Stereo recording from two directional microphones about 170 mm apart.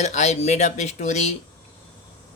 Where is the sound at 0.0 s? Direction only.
40° left (ahead or behind).